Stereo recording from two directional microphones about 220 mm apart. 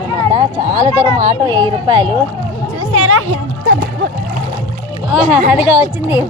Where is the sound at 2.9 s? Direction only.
80° right.